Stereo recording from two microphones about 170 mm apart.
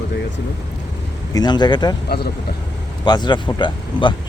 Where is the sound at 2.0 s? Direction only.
70° left (ahead or behind).